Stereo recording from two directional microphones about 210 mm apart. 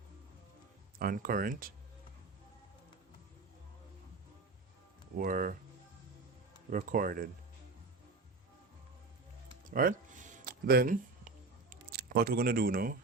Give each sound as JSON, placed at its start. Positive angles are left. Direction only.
{"t": 0.9, "sound": "speech", "side_deg": -45}
{"t": 5.1, "sound": "speech", "side_deg": -40}
{"t": 6.7, "sound": "speech", "side_deg": -40}
{"t": 9.6, "sound": "a sound", "side_deg": -40}